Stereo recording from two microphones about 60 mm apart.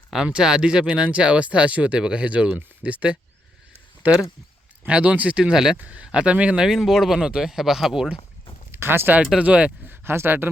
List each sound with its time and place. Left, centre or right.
0.3 s speech: centre
5.7 s speech: right
6.7 s speech: centre
8.7 s speech: right
9.4 s speech: right
9.9 s speech: right